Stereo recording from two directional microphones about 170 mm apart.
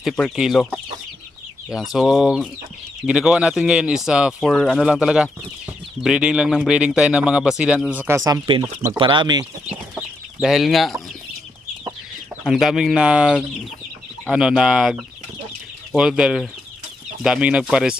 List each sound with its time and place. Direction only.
0.0 s speech: centre (ahead or behind); by 9.4 s 25° right (ahead or behind)
9.4 s chicken: 15° right (ahead or behind)
10.4 s speech: centre (ahead or behind)
12.5 s speech: centre (ahead or behind)